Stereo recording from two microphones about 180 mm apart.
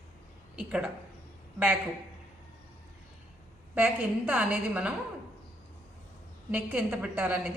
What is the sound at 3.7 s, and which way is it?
A woman's voice, 10° right (ahead or behind).